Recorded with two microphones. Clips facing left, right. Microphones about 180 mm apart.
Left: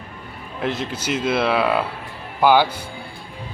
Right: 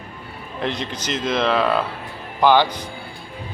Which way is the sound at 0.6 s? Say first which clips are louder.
Left 1 dB; 5° left (ahead or behind).